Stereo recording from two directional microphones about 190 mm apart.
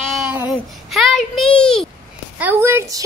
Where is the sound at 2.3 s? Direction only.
10° right (ahead or behind).